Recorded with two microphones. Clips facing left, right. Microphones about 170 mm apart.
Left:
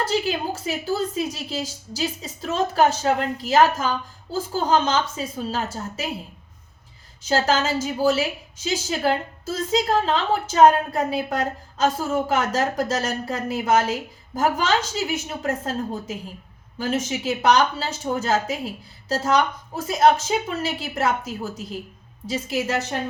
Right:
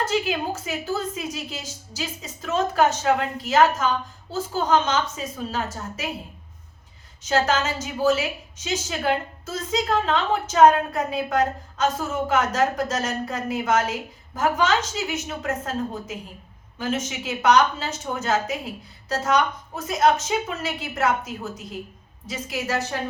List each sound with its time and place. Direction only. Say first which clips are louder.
0.0 s a woman's voice: left 1 dB; 35° left (ahead or behind)
7.2 s a woman's voice: left 1 dB; 30° left (ahead or behind)
22.3 s a woman's voice: left 3 dB; 30° left (ahead or behind)